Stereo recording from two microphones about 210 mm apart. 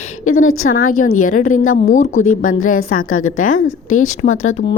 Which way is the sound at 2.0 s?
75° left (ahead or behind).